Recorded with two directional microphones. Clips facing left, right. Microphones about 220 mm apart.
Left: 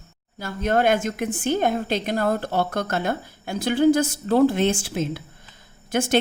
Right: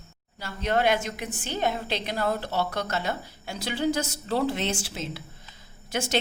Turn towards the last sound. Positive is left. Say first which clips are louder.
# left 7 dB
turn(degrees=50)  # may be behind; listen again after turning